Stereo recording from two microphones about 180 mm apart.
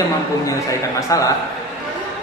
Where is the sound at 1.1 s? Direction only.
15° left (ahead or behind).